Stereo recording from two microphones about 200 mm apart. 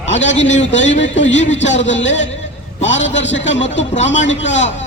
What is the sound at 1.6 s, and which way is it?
A man's voice, 65° left (ahead or behind).